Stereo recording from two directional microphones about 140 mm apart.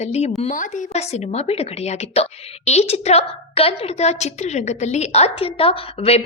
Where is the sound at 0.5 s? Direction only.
65° left (ahead or behind).